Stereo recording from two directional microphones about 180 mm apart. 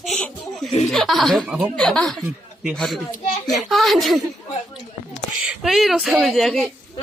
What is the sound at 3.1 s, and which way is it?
Speech, 40° left (ahead or behind).